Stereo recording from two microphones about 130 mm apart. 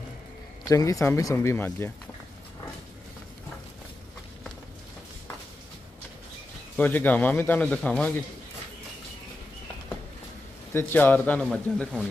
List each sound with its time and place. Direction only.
0.7 s speech: 25° left (ahead or behind)
6.8 s a man's voice: 15° left (ahead or behind)
10.7 s a man's voice: 15° left (ahead or behind)